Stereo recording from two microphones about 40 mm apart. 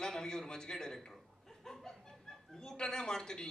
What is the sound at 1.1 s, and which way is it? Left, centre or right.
Chuckle, centre.